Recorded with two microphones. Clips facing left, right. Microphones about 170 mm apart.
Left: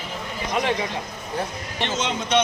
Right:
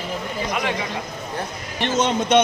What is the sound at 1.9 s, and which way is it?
Speech, 45° right (ahead or behind).